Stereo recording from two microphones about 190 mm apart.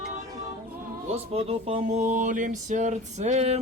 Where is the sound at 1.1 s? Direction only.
30° right (ahead or behind).